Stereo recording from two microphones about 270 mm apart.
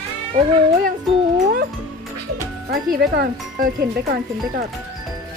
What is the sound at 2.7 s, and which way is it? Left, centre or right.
Speech, right.